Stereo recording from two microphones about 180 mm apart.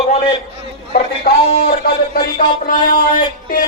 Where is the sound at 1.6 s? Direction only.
55° left (ahead or behind).